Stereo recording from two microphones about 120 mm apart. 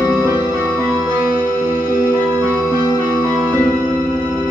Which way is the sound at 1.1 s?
10° right (ahead or behind).